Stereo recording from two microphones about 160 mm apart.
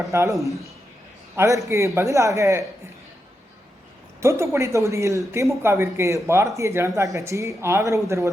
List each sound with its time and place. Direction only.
0.0 s a woman's voice: 20° right (ahead or behind)
1.4 s a woman's voice: 20° right (ahead or behind)
4.2 s a woman's voice: 20° right (ahead or behind)